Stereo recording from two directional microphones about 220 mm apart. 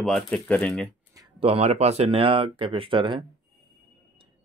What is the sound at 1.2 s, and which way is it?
Speech, 25° right (ahead or behind).